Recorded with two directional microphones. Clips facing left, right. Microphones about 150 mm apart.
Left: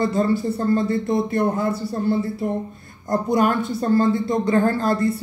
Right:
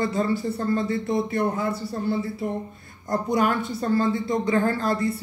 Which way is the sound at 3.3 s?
40° left (ahead or behind).